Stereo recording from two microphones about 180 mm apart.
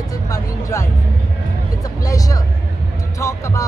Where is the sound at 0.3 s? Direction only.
20° left (ahead or behind).